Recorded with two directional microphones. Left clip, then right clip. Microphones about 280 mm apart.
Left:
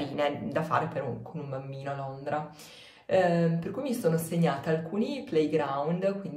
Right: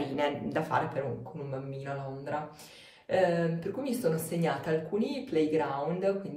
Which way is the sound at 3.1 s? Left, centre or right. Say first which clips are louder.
Left 2 dB; centre.